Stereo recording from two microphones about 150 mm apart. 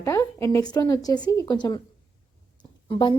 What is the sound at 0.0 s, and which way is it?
A woman's voice, 15° left (ahead or behind).